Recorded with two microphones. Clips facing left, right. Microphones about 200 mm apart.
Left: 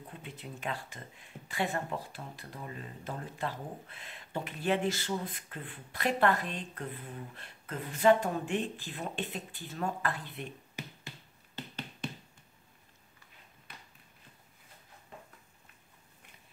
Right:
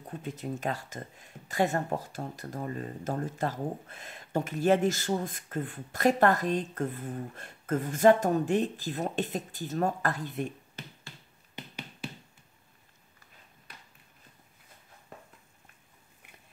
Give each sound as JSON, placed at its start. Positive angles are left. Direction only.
{"t": 0.2, "sound": "speech", "side_deg": -40}
{"t": 10.8, "sound": "finger snapping", "side_deg": 10}
{"t": 11.5, "sound": "finger snapping", "side_deg": -10}